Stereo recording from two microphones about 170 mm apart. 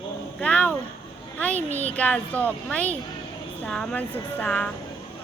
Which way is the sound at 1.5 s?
40° right (ahead or behind).